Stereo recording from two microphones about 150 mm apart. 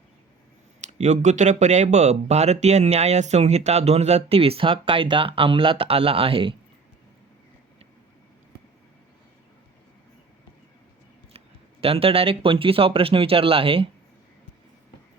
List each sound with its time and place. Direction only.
0.8 s speech: 50° right (ahead or behind)
11.3 s speech: 40° right (ahead or behind)